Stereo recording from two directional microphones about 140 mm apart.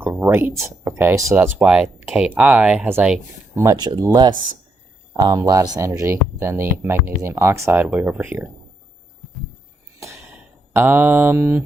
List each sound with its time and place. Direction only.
0.0 s speech: 15° right (ahead or behind)
1.5 s speech: 5° right (ahead or behind)
3.5 s speech: 25° right (ahead or behind)
10.8 s speech: 15° right (ahead or behind)